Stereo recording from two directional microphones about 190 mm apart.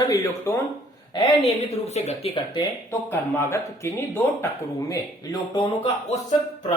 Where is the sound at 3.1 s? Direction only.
10° left (ahead or behind).